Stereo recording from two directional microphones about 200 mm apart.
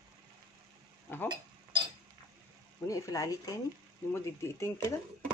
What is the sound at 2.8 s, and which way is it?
Speech, 15° left (ahead or behind).